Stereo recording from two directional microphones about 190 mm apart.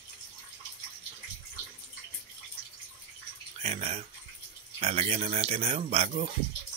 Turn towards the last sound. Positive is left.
turn(degrees=-35)  # may be behind; listen again after turning